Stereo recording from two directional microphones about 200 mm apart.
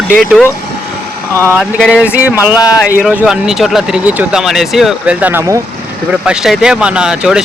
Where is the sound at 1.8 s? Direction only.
5° right (ahead or behind).